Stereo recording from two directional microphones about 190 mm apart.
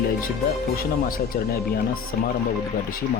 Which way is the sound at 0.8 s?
50° left (ahead or behind).